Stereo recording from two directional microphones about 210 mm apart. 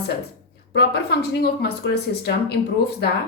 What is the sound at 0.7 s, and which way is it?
A woman's voice, 50° left (ahead or behind).